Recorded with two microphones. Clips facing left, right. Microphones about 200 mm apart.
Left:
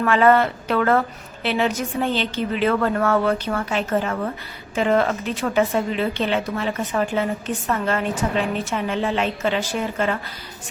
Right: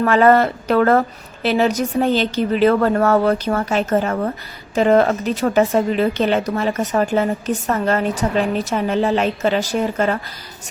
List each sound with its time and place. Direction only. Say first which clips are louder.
0.0 s speech: right 3 dB; 40° right (ahead or behind)